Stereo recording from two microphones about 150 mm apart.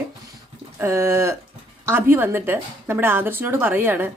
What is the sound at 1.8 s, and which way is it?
A woman's voice, 15° right (ahead or behind).